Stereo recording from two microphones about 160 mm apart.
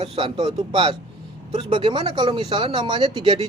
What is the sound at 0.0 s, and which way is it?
Speech, 35° right (ahead or behind).